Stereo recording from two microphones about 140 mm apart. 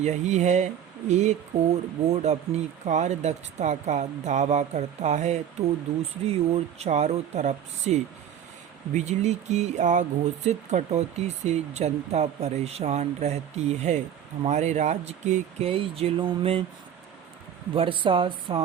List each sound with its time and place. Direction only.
0.0 s speech: 55° right (ahead or behind)
15.7 s speech: 40° right (ahead or behind)
17.7 s speech: 40° right (ahead or behind)